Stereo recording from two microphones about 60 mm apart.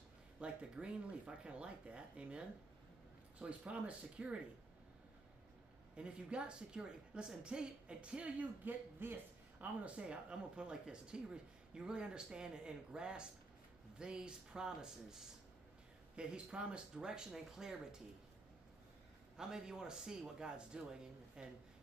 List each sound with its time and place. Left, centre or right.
0.4 s speech: centre
5.9 s speech: centre
8.6 s a man's voice: right
9.8 s speech: centre
19.3 s speech: centre